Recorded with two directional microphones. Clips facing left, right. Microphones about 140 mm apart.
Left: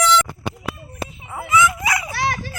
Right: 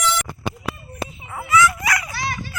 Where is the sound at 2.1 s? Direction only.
75° left (ahead or behind).